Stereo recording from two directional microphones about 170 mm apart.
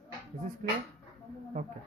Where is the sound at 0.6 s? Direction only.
50° right (ahead or behind).